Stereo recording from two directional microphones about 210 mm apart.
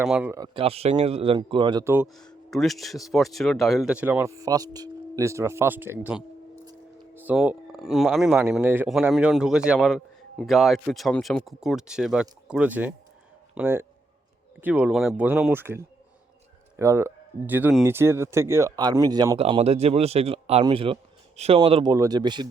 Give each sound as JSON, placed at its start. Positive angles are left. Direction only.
{"t": 0.0, "sound": "speech", "side_deg": -5}
{"t": 0.3, "sound": "speech", "side_deg": -20}
{"t": 1.8, "sound": "speech", "side_deg": -10}
{"t": 2.1, "sound": "speech", "side_deg": 0}
{"t": 6.7, "sound": "a sound", "side_deg": -20}
{"t": 7.3, "sound": "speech", "side_deg": -5}